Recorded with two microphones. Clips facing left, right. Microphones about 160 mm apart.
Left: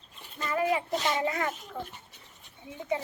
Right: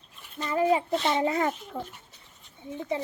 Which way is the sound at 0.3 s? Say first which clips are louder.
Right 4 dB; 25° right (ahead or behind).